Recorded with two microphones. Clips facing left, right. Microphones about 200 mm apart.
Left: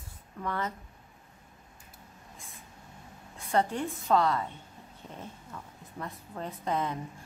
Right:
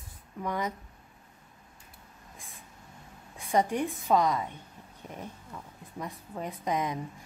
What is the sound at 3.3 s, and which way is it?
Speech, 15° right (ahead or behind).